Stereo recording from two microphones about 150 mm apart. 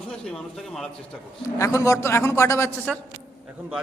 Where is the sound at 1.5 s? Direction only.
20° left (ahead or behind).